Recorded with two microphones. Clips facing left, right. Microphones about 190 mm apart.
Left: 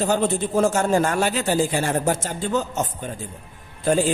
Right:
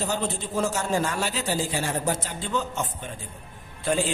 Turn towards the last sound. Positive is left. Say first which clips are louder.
# left 5 dB
turn(degrees=45)  # may be behind; listen again after turning